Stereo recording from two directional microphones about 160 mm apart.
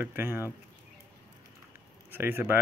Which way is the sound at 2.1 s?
15° right (ahead or behind).